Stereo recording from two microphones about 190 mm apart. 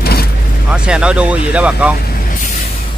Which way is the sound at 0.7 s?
5° right (ahead or behind).